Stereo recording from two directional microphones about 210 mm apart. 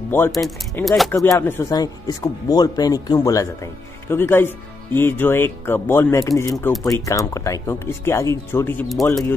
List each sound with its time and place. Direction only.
0.3 s speech: centre (ahead or behind)
1.1 s speech: 10° left (ahead or behind)
6.5 s speech: centre (ahead or behind)
6.8 s speech: 15° left (ahead or behind)